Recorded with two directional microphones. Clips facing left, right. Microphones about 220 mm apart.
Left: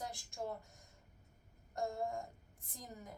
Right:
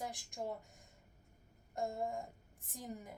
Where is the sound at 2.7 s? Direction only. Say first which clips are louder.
Right 4 dB; 15° right (ahead or behind).